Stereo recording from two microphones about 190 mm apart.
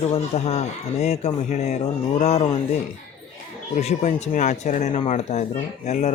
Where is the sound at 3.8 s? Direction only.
35° left (ahead or behind).